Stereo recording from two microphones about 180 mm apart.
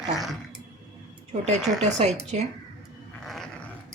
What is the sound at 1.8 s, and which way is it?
Speech, 40° right (ahead or behind).